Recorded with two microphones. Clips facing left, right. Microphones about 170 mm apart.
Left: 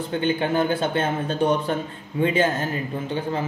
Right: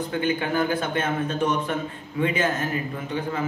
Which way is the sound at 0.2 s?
30° left (ahead or behind).